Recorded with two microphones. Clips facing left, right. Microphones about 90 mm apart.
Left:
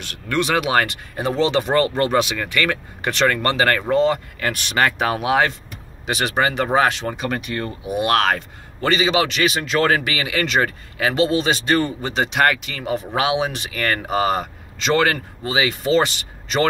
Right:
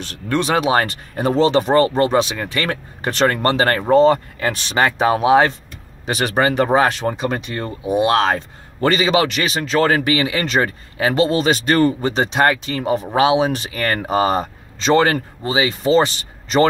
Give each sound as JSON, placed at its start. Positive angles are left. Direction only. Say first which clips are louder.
{"t": 0.0, "sound": "a man's voice", "louder": "right 2 dB", "side_deg": -30}
{"t": 6.0, "sound": "a man's voice", "louder": "right 3 dB", "side_deg": -40}
{"t": 8.8, "sound": "a man's voice", "louder": "right 3 dB", "side_deg": -40}